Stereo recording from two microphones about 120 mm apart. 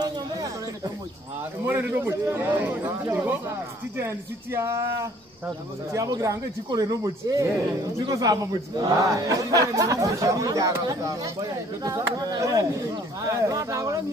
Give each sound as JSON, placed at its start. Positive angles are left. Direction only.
{"t": 1.7, "sound": "a man's voice", "side_deg": -15}